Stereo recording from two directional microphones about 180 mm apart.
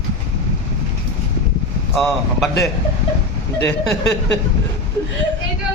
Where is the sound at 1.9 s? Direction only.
Centre (ahead or behind).